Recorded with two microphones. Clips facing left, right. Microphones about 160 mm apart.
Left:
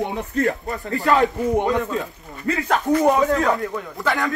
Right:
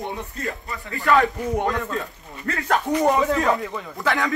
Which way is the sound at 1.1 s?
20° left (ahead or behind).